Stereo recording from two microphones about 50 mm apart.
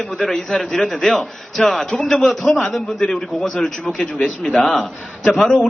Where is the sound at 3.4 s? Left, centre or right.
Centre.